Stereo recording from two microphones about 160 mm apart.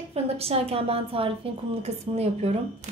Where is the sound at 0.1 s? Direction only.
40° right (ahead or behind).